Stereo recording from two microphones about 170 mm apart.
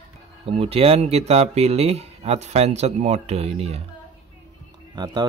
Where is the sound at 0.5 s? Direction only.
35° right (ahead or behind).